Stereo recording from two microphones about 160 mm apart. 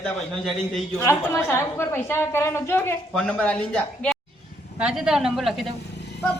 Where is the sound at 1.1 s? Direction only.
15° left (ahead or behind).